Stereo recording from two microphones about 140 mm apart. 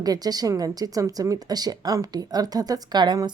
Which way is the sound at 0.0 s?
25° right (ahead or behind).